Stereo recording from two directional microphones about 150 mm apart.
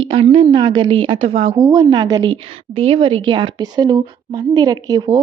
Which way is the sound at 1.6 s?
25° right (ahead or behind).